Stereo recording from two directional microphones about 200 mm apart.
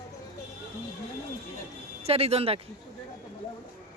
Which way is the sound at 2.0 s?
30° right (ahead or behind).